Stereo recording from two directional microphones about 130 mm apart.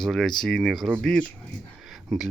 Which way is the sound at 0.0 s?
5° left (ahead or behind).